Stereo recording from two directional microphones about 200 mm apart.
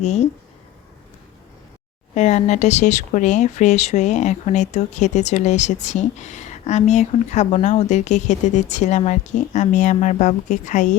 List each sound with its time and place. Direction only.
0.0 s speech: 35° left (ahead or behind)
2.1 s speech: 35° left (ahead or behind)